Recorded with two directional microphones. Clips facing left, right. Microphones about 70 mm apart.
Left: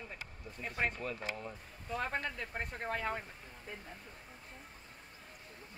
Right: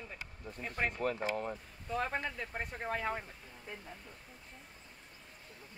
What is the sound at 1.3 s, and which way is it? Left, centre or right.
Speech, right.